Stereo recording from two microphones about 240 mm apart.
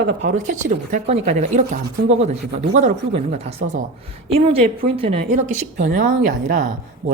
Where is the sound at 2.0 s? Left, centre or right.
Right.